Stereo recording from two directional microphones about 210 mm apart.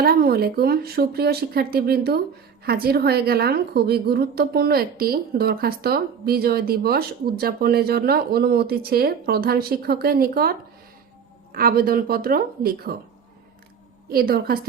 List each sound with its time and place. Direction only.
0.0 s a woman's voice: 45° right (ahead or behind)
14.1 s a woman's voice: 45° right (ahead or behind)